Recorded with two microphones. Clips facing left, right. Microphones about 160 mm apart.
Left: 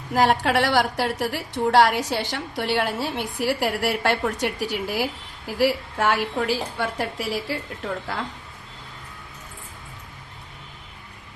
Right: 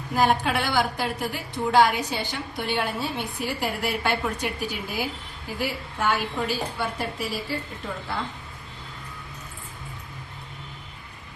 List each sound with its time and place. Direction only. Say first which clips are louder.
0.1 s a woman's voice: left 3 dB; 80° left